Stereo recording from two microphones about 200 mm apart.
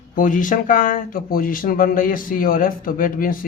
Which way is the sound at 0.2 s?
40° left (ahead or behind).